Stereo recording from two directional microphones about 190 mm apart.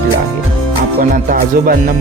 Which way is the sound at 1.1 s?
45° right (ahead or behind).